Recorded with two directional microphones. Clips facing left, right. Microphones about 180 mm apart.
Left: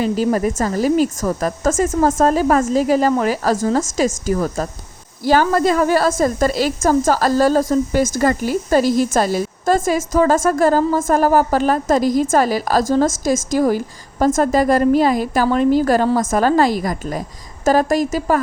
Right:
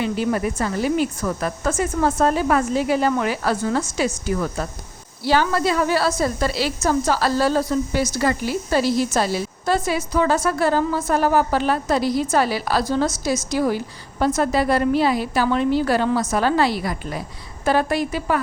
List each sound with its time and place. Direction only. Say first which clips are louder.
0.0 s a woman's voice: left 4 dB; 40° left (ahead or behind)